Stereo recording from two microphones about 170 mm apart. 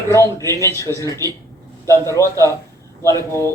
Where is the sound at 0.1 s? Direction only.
15° left (ahead or behind).